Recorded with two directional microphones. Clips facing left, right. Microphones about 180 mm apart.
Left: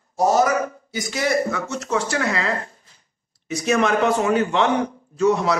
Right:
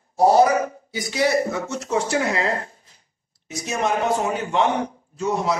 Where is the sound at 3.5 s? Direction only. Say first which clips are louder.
Left 5 dB; 80° left.